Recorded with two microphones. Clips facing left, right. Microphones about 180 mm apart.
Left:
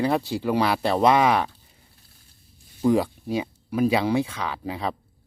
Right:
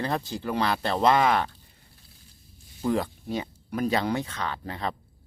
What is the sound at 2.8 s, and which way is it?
Speech, 10° left (ahead or behind).